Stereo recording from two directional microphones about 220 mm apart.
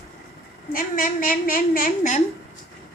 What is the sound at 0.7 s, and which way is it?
A woman's voice, 40° left (ahead or behind).